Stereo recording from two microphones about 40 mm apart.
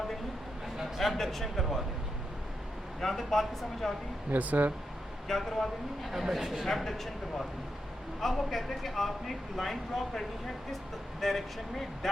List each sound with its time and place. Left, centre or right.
0.9 s speech: centre
3.0 s speech: centre
4.3 s speech: right
5.3 s speech: centre